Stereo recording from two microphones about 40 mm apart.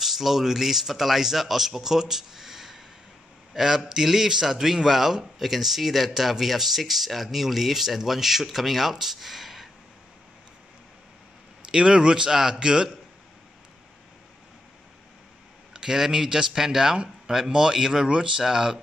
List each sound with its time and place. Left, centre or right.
0.0 s a man's voice: centre
11.7 s speech: right
15.7 s speech: centre